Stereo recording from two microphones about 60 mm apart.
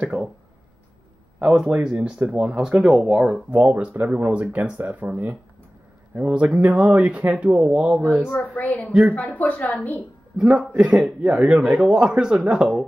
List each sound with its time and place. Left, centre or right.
0.0 s speech: centre
1.4 s speech: centre
3.5 s speech: right
8.3 s a woman's voice: left
10.3 s speech: centre